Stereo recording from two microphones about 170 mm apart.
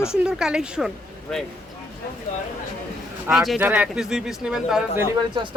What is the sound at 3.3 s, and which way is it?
Speech, 5° right (ahead or behind).